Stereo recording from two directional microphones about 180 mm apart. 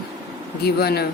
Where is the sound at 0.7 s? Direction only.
60° left (ahead or behind).